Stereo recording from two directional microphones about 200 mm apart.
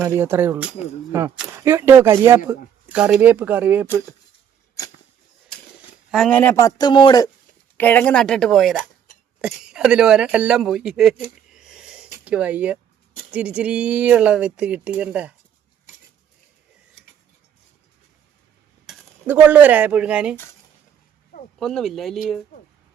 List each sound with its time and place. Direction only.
0.0 s speech: 10° right (ahead or behind)
6.1 s a man's voice: centre (ahead or behind); by 7.3 s 20° left (ahead or behind)
7.8 s speech: 10° left (ahead or behind)
11.4 s a sound: 5° right (ahead or behind)
13.3 s speech: 5° right (ahead or behind)
18.9 s speech: 10° right (ahead or behind)
21.6 s speech: centre (ahead or behind)